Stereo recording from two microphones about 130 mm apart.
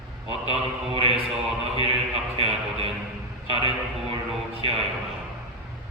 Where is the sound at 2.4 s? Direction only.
50° right (ahead or behind).